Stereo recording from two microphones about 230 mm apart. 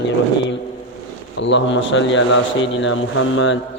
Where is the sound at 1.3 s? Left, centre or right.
Left.